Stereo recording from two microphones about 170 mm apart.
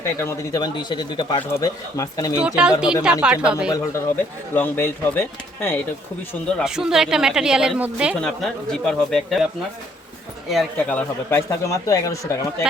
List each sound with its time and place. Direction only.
0.0 s a man's voice: 15° left (ahead or behind)
2.4 s speech: 5° right (ahead or behind)
4.5 s speech: 10° left (ahead or behind)
6.7 s speech: 5° right (ahead or behind)
8.1 s speech: 5° left (ahead or behind)
10.5 s speech: 5° left (ahead or behind)